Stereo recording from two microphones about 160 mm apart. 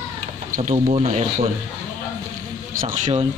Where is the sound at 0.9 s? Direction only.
40° right (ahead or behind).